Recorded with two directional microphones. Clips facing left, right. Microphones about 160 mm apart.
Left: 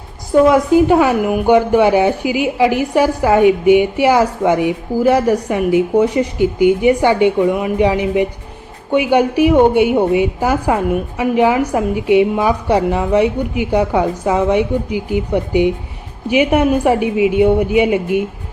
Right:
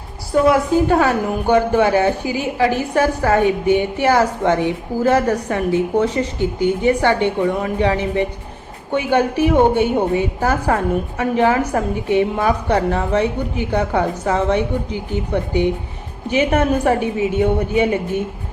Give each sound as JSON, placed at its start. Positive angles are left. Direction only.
{"t": 0.5, "sound": "a woman's voice", "side_deg": 15}